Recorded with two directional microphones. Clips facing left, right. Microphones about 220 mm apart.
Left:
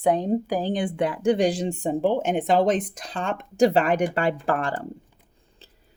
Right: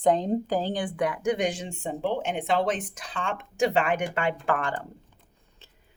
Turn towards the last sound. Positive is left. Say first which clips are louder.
# left 3 dB
turn(degrees=35)  # may be behind; listen again after turning